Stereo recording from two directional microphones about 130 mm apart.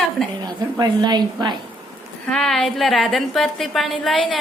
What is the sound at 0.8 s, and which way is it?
Speech, 35° right (ahead or behind).